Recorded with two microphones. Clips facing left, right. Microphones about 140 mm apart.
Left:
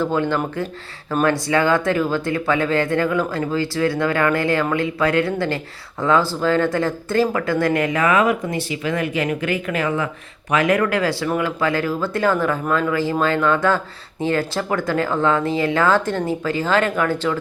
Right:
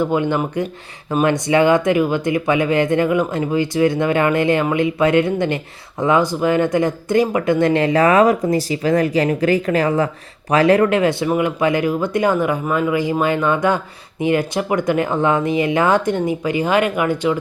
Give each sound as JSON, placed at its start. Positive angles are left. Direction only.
{"t": 0.0, "sound": "speech", "side_deg": -15}